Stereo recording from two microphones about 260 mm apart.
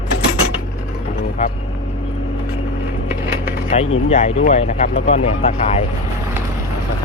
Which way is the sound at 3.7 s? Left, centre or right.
Left.